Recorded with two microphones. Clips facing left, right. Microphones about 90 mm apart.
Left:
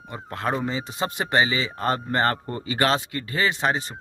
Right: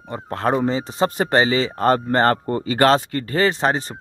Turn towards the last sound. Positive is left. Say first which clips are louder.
# right 5 dB
turn(degrees=-40)  # may be behind; listen again after turning